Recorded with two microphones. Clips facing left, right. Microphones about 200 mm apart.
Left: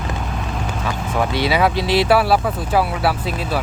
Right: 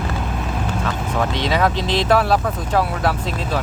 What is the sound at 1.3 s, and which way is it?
Speech, 10° left (ahead or behind).